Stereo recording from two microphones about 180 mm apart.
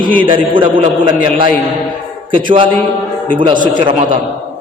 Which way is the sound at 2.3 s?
30° right (ahead or behind).